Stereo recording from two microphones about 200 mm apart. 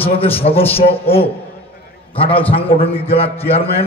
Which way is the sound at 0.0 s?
30° left (ahead or behind).